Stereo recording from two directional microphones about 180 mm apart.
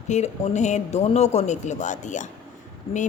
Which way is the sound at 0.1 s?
40° left (ahead or behind).